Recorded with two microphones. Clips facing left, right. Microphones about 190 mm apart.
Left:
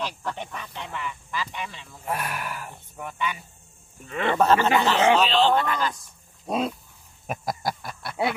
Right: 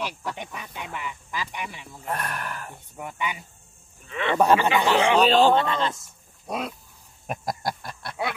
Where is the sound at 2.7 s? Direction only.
15° right (ahead or behind).